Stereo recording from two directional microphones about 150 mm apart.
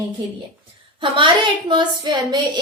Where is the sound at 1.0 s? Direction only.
35° right (ahead or behind).